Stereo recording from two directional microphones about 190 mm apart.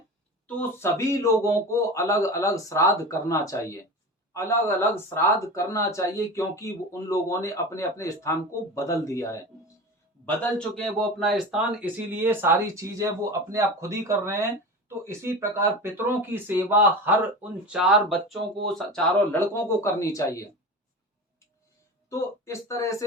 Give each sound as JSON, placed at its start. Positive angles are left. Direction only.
{"t": 0.4, "sound": "speech", "side_deg": 10}
{"t": 10.8, "sound": "speech", "side_deg": 0}
{"t": 22.1, "sound": "speech", "side_deg": 15}